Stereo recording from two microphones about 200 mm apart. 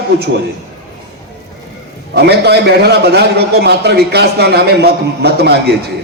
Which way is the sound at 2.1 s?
55° right (ahead or behind).